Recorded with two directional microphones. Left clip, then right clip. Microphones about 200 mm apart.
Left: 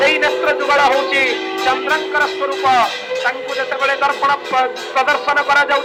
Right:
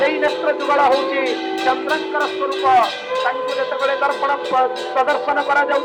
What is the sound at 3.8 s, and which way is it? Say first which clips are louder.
Speech: left 4 dB; 10° right (ahead or behind).